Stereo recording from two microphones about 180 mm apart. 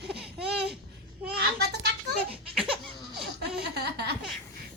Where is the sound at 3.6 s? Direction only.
65° right (ahead or behind).